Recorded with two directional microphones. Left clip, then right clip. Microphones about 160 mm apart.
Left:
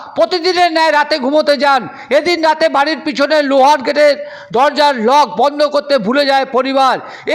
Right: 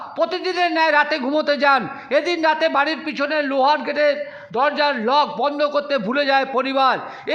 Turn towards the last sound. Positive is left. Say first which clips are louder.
# left 5 dB
turn(degrees=30)  # may be behind; listen again after turning